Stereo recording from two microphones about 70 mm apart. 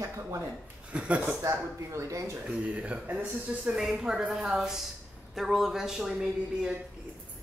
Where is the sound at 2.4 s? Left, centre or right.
Centre.